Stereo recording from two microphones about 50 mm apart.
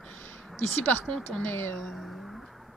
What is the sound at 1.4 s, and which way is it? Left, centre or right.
Speech, left.